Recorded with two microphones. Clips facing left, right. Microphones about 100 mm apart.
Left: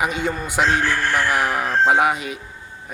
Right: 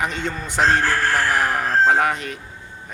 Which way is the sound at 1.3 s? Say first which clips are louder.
Even; 5° left (ahead or behind).